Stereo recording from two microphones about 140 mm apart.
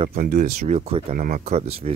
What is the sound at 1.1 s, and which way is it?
Speech, 75° right (ahead or behind).